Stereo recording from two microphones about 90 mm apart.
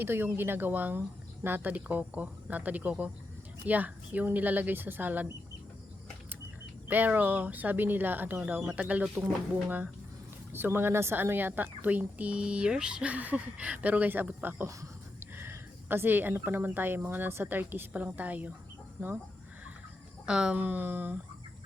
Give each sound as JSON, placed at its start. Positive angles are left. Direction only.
{"t": 0.0, "sound": "speech", "side_deg": -25}
{"t": 6.8, "sound": "speech", "side_deg": -20}
{"t": 20.2, "sound": "speech", "side_deg": -10}
{"t": 20.6, "sound": "speech", "side_deg": -20}